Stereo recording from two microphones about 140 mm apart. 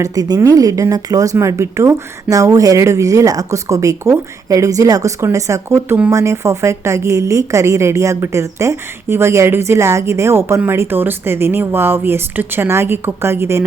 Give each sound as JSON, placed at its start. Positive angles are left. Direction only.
{"t": 0.0, "sound": "speech", "side_deg": -25}